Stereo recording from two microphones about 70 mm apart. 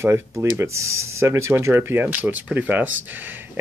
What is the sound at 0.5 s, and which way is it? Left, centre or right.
Speech, right.